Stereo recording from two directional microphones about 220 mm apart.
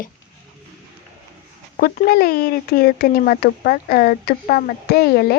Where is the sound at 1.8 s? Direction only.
45° left (ahead or behind).